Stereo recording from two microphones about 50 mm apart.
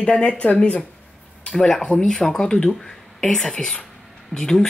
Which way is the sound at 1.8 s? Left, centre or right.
Centre.